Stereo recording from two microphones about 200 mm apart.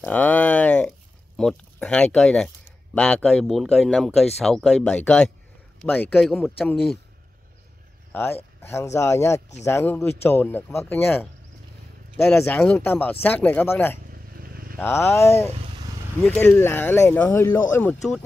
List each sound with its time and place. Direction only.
0.0 s a sound: 10° left (ahead or behind)
2.1 s speech: 5° left (ahead or behind)
6.2 s speech: centre (ahead or behind)
8.1 s speech: 10° left (ahead or behind)
14.3 s vehicle: 45° right (ahead or behind)
14.8 s speech: 10° left (ahead or behind)